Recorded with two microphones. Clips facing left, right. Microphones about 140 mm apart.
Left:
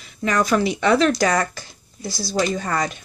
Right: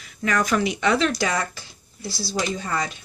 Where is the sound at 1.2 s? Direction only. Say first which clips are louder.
Left 5 dB; 45° left (ahead or behind).